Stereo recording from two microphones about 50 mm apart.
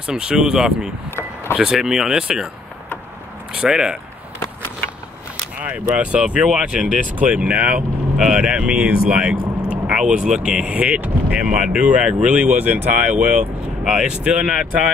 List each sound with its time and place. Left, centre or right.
0.0 s speech: centre
3.5 s speech: centre
5.6 s speech: right
8.2 s speech: centre; by 13.5 s right
13.8 s speech: centre